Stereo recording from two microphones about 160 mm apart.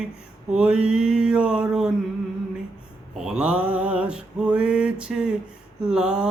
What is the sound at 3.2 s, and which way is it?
Mantra, 5° right (ahead or behind).